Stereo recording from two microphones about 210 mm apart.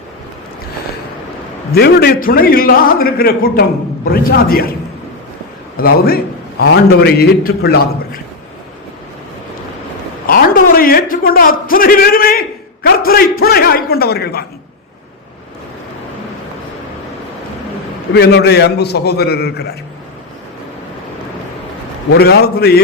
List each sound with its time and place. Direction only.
1.7 s a man's voice: 50° left (ahead or behind)
5.7 s a man's voice: 45° left (ahead or behind)
10.2 s a sound: 45° left (ahead or behind)
13.4 s a man's voice: 45° left (ahead or behind)
18.1 s a man's voice: 50° left (ahead or behind)
22.1 s a man's voice: 50° left (ahead or behind)